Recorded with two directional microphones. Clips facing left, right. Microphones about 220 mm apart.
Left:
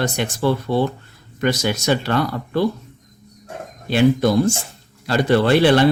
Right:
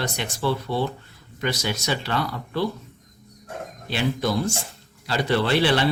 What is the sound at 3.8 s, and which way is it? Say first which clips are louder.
Speech: left 9 dB; 50° left (ahead or behind).